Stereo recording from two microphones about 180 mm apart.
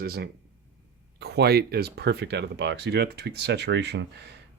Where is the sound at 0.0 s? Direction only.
60° right (ahead or behind).